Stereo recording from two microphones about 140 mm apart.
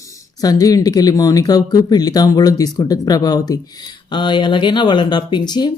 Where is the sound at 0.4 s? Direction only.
25° left (ahead or behind).